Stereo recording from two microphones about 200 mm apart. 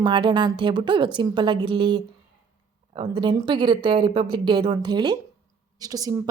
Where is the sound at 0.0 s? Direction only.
20° right (ahead or behind).